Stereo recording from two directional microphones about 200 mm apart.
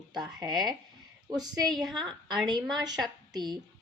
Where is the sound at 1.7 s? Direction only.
Centre (ahead or behind).